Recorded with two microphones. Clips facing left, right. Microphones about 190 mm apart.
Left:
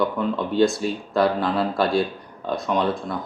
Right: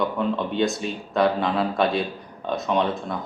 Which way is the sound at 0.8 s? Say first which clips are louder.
Left 1 dB; centre (ahead or behind).